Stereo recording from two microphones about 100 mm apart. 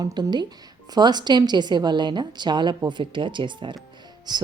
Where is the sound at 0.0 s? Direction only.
45° right (ahead or behind).